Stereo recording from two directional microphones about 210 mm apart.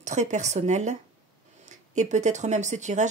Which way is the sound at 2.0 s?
35° right (ahead or behind).